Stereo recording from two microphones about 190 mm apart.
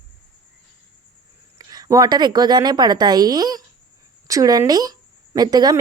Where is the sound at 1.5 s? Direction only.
20° right (ahead or behind).